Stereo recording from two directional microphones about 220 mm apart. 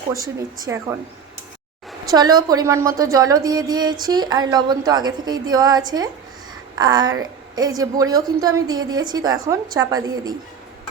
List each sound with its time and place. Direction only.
0.1 s speech: 15° right (ahead or behind)
2.0 s a woman's voice: 15° right (ahead or behind)